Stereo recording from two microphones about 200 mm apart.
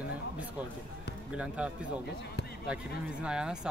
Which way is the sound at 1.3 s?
5° right (ahead or behind).